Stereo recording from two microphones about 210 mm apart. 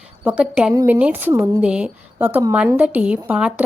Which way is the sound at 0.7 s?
15° right (ahead or behind).